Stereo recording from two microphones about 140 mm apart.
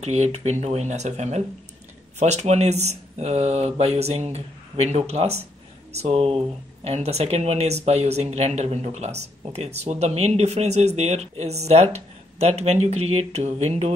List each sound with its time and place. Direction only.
0.0 s speech: 50° right (ahead or behind)